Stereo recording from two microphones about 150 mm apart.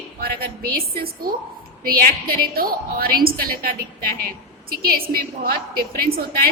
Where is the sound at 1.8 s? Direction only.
80° right.